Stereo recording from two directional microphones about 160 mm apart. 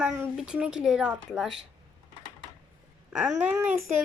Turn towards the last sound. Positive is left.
turn(degrees=-10)  # may be behind; listen again after turning